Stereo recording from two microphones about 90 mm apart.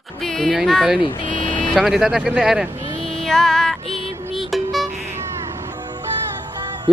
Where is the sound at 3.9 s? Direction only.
90° left.